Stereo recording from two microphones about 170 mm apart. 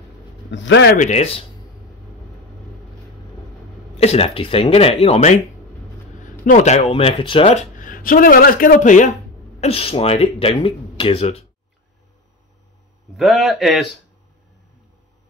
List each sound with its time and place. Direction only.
0.5 s speech: 90° left
0.9 s speech: 45° left (ahead or behind)
4.0 s speech: 35° left (ahead or behind)
7.7 s speech: 55° left (ahead or behind)
9.6 s speech: 35° left (ahead or behind)
13.1 s a man's voice: centre (ahead or behind)